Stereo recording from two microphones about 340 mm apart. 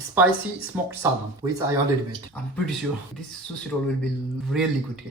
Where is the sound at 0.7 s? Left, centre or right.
Centre.